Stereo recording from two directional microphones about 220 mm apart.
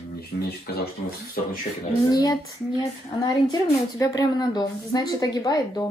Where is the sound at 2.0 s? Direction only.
15° left (ahead or behind).